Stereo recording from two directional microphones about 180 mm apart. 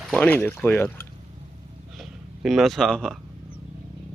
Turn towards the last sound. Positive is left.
turn(degrees=5)  # may be behind; listen again after turning